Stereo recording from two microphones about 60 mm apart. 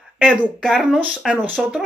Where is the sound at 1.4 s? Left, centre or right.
Right.